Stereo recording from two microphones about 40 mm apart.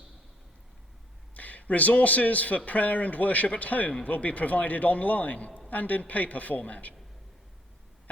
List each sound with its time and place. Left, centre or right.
1.3 s speech: left